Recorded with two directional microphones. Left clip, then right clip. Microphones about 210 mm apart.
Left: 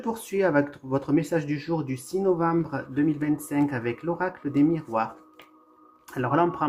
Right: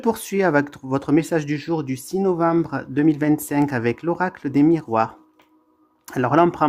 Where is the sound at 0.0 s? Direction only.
45° right (ahead or behind).